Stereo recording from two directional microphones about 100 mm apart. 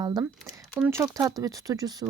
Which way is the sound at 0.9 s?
30° right (ahead or behind).